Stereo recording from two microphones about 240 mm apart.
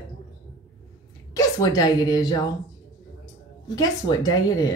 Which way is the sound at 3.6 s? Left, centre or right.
Centre.